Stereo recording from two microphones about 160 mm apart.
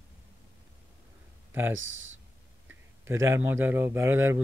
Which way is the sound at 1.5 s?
15° right (ahead or behind).